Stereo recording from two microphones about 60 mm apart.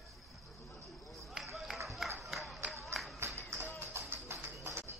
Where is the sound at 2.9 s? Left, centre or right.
Centre.